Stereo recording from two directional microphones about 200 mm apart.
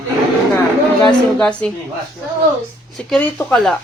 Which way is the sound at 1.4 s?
5° left (ahead or behind).